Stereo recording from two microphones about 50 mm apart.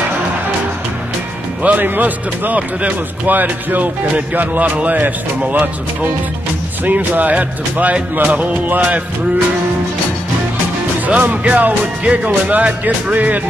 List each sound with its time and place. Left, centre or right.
1.6 s speech: right
6.8 s speech: right
11.1 s speech: right